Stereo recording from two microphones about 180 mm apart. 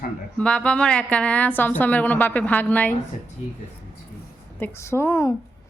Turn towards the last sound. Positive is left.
turn(degrees=15)  # may be behind; listen again after turning